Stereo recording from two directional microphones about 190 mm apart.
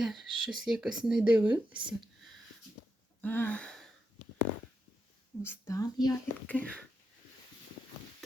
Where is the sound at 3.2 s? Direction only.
10° left (ahead or behind).